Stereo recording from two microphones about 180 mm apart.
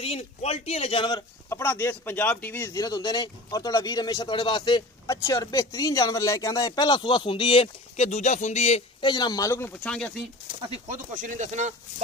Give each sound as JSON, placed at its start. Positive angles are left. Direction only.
{"t": 0.0, "sound": "a man's voice", "side_deg": 35}
{"t": 1.6, "sound": "speech", "side_deg": 15}
{"t": 9.1, "sound": "speech", "side_deg": 20}
{"t": 10.7, "sound": "speech", "side_deg": -45}